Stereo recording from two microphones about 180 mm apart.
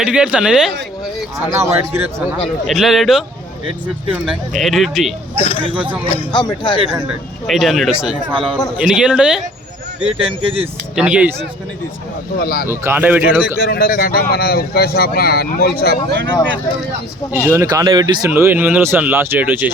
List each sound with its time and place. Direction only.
0.0 s speech: 5° right (ahead or behind)
1.5 s speech: 15° right (ahead or behind)
2.6 s speech: centre (ahead or behind)
5.3 s speech: 30° left (ahead or behind)
7.4 s speech: centre (ahead or behind)
8.3 s speech: 30° right (ahead or behind)
8.8 s speech: 5° right (ahead or behind)
10.2 s speech: 30° right (ahead or behind)
10.9 s speech: 5° right (ahead or behind)
12.4 s speech: 55° left (ahead or behind)
12.6 s speech: 15° right (ahead or behind)
13.6 s speech: 60° left (ahead or behind)
17.3 s speech: 15° right (ahead or behind)
18.3 s speech: 10° right (ahead or behind)